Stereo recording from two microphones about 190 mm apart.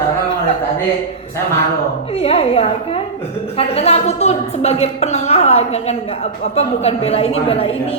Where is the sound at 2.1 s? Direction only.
30° left (ahead or behind).